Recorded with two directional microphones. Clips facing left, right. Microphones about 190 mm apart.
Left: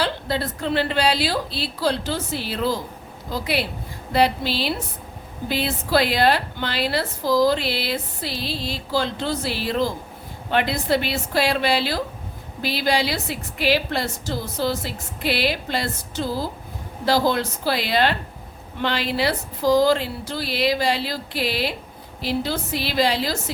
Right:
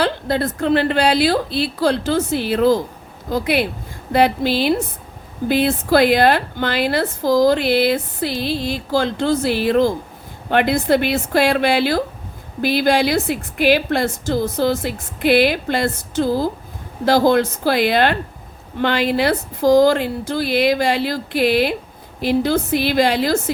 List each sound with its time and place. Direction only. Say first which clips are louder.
0.0 s a woman's voice: right 5 dB; 50° right (ahead or behind)